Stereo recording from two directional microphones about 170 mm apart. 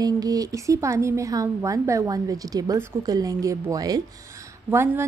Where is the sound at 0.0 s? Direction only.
20° right (ahead or behind).